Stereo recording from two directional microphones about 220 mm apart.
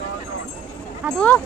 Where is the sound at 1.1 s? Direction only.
5° left (ahead or behind).